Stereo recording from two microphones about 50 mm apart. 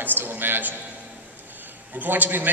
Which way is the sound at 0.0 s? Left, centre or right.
Right.